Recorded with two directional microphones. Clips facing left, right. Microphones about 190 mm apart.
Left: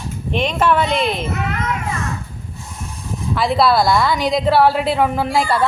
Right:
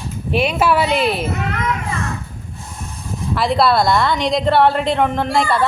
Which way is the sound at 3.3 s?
Centre (ahead or behind).